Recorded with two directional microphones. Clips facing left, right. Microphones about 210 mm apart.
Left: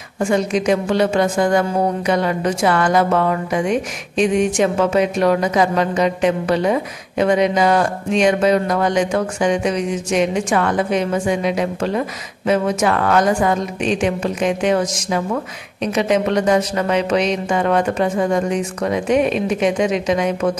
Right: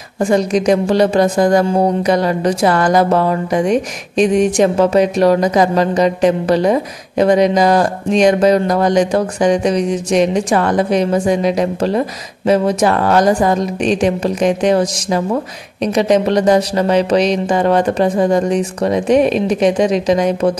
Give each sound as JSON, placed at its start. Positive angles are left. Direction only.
{"t": 0.2, "sound": "a woman's voice", "side_deg": -35}